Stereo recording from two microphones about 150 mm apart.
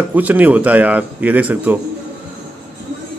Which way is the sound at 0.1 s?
10° right (ahead or behind).